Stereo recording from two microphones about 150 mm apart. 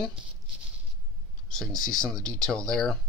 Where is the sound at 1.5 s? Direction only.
5° left (ahead or behind).